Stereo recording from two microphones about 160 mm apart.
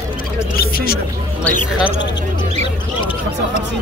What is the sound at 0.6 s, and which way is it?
Music, 75° left (ahead or behind).